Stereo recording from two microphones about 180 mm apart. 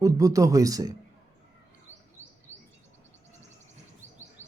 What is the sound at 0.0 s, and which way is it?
Speech, 20° right (ahead or behind).